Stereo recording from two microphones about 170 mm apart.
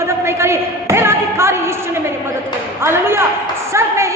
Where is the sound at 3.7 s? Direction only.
15° right (ahead or behind).